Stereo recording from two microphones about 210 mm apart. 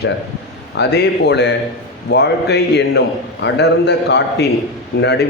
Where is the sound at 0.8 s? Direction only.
50° left (ahead or behind).